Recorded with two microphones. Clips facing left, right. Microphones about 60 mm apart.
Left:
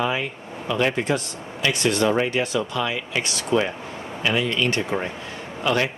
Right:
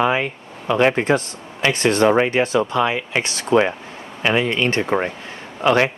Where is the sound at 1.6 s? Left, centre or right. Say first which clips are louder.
Right 5 dB; right.